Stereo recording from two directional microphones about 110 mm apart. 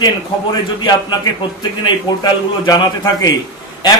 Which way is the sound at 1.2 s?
40° left (ahead or behind).